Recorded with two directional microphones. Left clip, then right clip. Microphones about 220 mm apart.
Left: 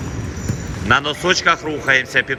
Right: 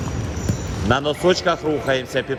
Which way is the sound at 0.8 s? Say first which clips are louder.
Left 2 dB; 15° right (ahead or behind).